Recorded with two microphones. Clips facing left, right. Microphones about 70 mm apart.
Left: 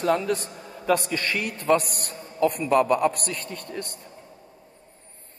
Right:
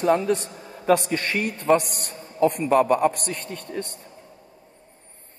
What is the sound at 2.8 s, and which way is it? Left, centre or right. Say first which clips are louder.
Speech: right 2 dB; right.